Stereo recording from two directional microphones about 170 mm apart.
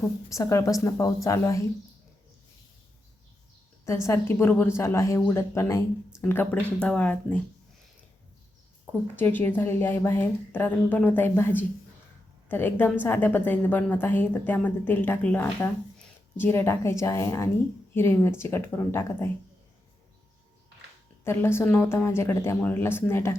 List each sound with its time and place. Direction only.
0.3 s a woman's voice: 20° left (ahead or behind)
3.8 s a woman's voice: 15° left (ahead or behind)
9.1 s a woman's voice: 10° left (ahead or behind)
21.2 s a woman's voice: 15° left (ahead or behind)